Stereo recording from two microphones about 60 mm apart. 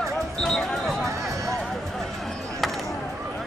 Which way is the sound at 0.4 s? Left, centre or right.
Centre.